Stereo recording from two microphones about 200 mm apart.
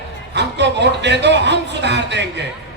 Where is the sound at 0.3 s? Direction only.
60° right (ahead or behind).